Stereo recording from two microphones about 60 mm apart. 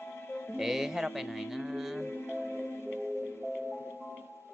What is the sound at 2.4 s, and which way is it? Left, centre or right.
Music, left.